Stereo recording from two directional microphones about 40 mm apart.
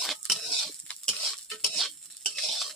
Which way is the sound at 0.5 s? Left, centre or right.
Centre.